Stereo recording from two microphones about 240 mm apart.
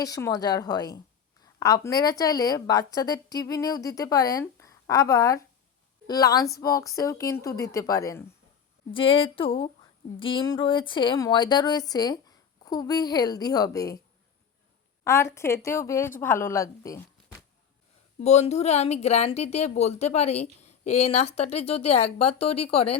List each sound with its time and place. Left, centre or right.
0.0 s a woman's voice: centre
15.0 s a woman's voice: centre
18.2 s speech: left